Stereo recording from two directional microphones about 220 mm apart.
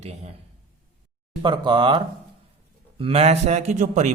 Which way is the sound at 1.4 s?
20° right (ahead or behind).